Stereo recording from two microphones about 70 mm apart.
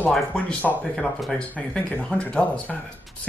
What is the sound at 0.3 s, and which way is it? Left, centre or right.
Speech, left.